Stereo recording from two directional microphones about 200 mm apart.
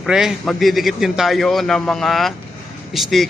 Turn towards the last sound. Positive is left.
turn(degrees=0)  # may be behind; listen again after turning